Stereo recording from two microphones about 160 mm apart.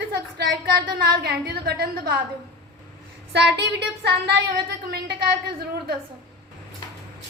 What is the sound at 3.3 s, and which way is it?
Speech, 90° right.